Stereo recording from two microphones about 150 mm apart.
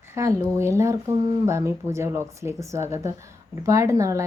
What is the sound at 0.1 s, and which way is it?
A woman's voice, 20° right (ahead or behind).